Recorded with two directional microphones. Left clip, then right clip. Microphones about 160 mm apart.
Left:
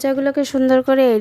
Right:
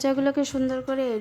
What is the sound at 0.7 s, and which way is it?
Speech, 50° left (ahead or behind).